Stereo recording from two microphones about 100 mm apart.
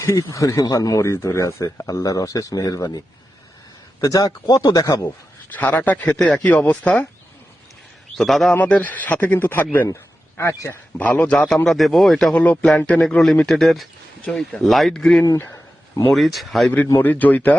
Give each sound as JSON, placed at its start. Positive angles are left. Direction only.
{"t": 0.0, "sound": "speech", "side_deg": 30}
{"t": 4.0, "sound": "speech", "side_deg": 40}
{"t": 5.0, "sound": "a man's voice", "side_deg": 20}
{"t": 8.1, "sound": "speech", "side_deg": 0}
{"t": 8.5, "sound": "a man's voice", "side_deg": 15}
{"t": 10.9, "sound": "a man's voice", "side_deg": 15}
{"t": 11.5, "sound": "speech", "side_deg": 0}
{"t": 12.3, "sound": "a man's voice", "side_deg": 15}
{"t": 17.0, "sound": "a man's voice", "side_deg": 15}